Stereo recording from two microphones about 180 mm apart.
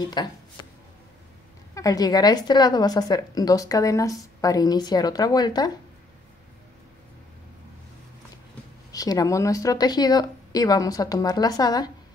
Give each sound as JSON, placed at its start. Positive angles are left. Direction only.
{"t": 0.2, "sound": "a woman's voice", "side_deg": 25}
{"t": 1.8, "sound": "a woman's voice", "side_deg": 20}
{"t": 8.9, "sound": "a woman's voice", "side_deg": 20}